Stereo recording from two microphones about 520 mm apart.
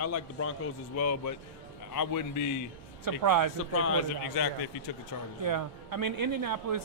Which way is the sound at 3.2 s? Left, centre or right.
Right.